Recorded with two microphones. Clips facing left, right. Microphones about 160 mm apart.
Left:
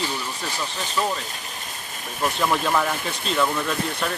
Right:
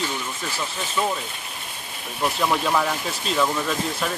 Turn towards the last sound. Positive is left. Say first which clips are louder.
# even
turn(degrees=-5)  # may be behind; listen again after turning